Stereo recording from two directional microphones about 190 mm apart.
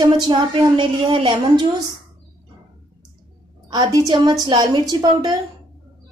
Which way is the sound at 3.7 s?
20° right (ahead or behind).